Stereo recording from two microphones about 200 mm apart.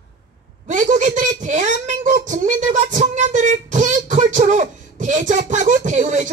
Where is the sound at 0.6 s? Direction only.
40° right (ahead or behind).